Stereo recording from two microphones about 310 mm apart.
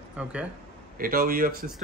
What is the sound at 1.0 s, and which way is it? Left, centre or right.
Speech, right.